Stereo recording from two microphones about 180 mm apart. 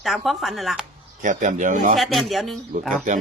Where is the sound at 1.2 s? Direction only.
45° right (ahead or behind).